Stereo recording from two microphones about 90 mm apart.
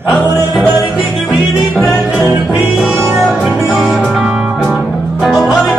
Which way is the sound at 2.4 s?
Centre (ahead or behind).